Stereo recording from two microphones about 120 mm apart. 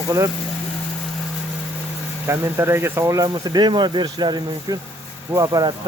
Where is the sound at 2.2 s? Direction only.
20° right (ahead or behind).